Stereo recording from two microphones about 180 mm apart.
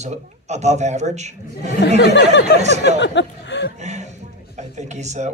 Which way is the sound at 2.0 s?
80° left.